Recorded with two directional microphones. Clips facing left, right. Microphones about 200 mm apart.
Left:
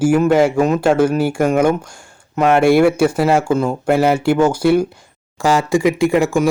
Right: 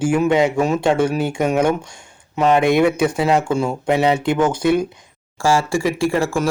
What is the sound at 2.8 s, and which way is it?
Speech, 10° left (ahead or behind).